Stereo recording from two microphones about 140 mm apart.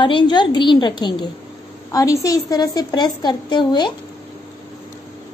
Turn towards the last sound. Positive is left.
turn(degrees=35)  # may be behind; listen again after turning